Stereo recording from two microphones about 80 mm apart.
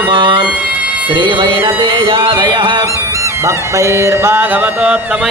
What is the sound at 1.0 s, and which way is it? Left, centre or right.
Music, right.